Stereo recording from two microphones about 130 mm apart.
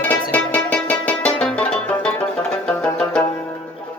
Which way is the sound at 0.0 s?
10° left (ahead or behind).